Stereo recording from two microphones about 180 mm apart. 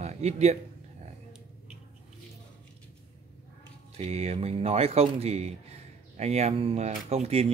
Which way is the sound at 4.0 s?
35° right (ahead or behind).